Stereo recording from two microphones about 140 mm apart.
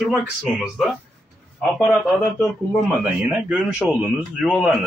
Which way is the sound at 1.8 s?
5° left (ahead or behind).